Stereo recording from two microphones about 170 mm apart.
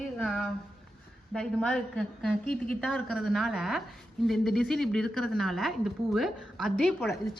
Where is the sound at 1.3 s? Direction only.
Centre (ahead or behind).